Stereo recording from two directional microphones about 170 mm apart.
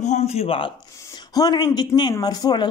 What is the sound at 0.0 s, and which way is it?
Speech, 40° left (ahead or behind).